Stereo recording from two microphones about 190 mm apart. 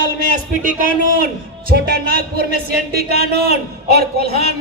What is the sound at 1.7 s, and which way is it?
Speech, 55° right (ahead or behind).